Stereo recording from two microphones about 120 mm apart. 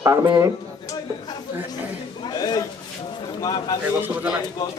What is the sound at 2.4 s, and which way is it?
A man's voice, 30° left (ahead or behind).